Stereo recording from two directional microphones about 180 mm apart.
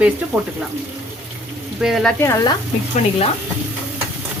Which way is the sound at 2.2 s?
20° left (ahead or behind).